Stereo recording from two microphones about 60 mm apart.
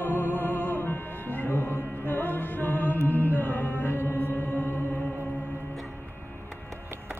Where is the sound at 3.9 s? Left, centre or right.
Left.